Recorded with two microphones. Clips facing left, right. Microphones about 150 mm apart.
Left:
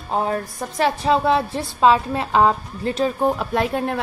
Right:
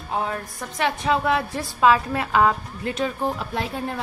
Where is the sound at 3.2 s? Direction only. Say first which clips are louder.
Left 6 dB; 55° left (ahead or behind).